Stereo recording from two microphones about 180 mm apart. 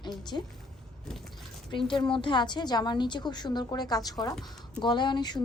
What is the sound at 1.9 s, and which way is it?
A woman's voice, 25° left (ahead or behind).